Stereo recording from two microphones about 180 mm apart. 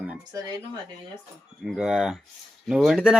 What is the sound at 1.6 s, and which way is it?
Speech, 5° right (ahead or behind).